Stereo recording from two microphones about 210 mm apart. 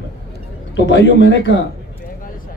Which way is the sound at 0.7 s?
60° left (ahead or behind).